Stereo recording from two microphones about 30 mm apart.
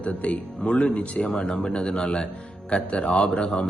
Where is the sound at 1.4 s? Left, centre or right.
Left.